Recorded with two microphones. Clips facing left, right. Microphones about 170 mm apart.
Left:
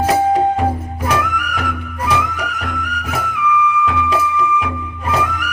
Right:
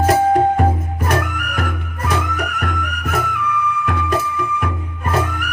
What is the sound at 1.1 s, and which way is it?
Music, 55° right (ahead or behind).